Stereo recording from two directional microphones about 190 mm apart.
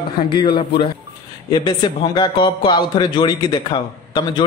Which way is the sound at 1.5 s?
20° left (ahead or behind).